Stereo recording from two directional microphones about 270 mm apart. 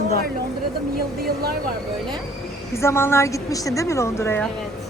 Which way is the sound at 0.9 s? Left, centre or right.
Right.